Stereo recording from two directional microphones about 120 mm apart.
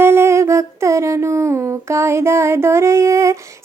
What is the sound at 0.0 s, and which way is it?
Humming, 20° right (ahead or behind).